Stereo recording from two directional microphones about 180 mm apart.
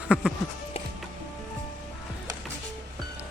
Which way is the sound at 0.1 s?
Centre (ahead or behind).